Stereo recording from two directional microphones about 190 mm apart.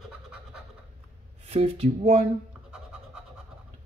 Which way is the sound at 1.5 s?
35° right (ahead or behind).